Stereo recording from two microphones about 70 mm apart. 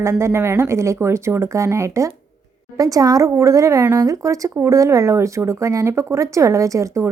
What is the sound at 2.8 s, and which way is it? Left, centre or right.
Speech, right.